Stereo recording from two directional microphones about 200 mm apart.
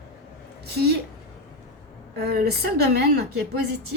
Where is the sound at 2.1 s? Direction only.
50° right (ahead or behind).